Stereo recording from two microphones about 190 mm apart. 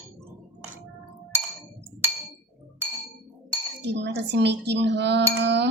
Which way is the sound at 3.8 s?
65° right (ahead or behind).